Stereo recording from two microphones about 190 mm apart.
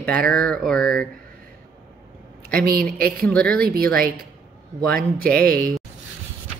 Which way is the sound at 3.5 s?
55° right (ahead or behind).